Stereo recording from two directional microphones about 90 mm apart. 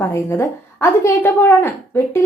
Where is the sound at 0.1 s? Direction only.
25° left (ahead or behind).